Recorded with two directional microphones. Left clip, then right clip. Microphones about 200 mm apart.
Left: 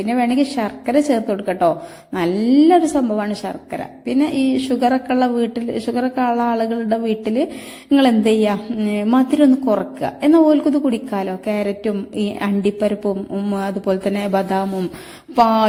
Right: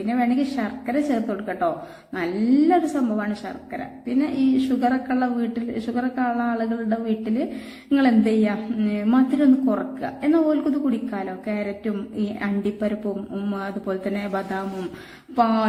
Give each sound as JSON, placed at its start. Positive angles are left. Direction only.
{"t": 0.1, "sound": "a woman's voice", "side_deg": 30}